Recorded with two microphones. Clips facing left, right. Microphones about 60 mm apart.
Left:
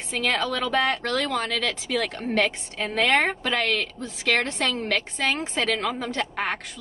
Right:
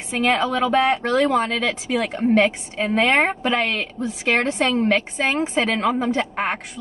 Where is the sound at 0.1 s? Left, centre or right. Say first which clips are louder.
Right 5 dB; right.